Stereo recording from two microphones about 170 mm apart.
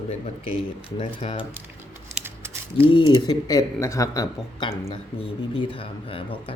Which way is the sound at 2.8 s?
30° left (ahead or behind).